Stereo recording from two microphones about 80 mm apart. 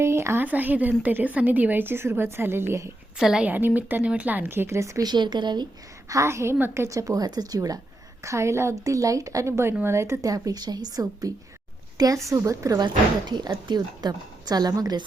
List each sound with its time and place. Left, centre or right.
0.0 s a sound: right
0.4 s a woman's voice: right
3.2 s a woman's voice: centre
3.4 s a woman's voice: right
5.0 s speech: right
6.1 s a woman's voice: right
8.2 s a woman's voice: right
12.8 s speech: right